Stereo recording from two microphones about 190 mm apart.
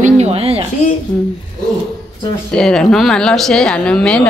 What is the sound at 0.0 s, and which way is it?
Speech, 35° right (ahead or behind).